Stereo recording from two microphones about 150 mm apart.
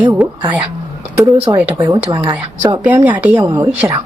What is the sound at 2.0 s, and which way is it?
Speech, 25° right (ahead or behind).